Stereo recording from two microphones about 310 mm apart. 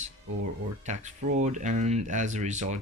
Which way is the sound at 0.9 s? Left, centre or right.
Right.